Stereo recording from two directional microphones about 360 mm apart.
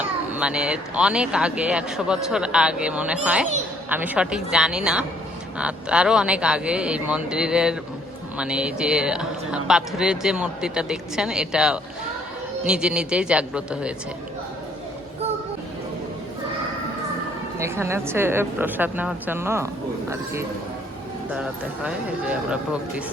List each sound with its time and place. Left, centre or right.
0.3 s speech: centre
17.6 s a woman's voice: centre
21.3 s speech: centre